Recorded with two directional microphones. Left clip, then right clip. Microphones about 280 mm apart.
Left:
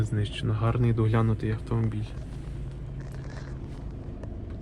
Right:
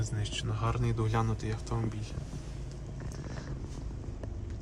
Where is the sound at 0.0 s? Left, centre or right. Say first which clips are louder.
Left 4 dB; centre.